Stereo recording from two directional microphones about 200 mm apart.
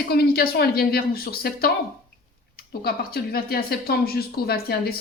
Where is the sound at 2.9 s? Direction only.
50° left (ahead or behind).